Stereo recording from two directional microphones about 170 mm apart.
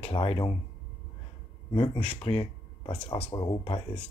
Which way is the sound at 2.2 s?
35° left (ahead or behind).